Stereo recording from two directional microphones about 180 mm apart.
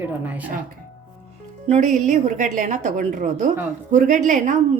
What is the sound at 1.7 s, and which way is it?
A woman's voice, 40° right (ahead or behind).